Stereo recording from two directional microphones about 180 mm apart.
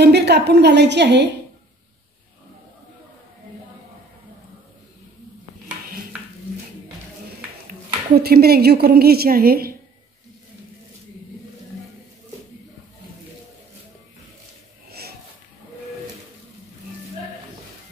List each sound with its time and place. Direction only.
0.0 s a woman's voice: 65° right (ahead or behind)
8.2 s a woman's voice: 60° right (ahead or behind)
14.9 s a sound: 60° right (ahead or behind)